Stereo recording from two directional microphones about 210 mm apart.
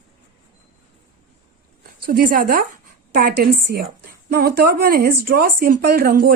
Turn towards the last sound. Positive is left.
turn(degrees=-45)  # may be behind; listen again after turning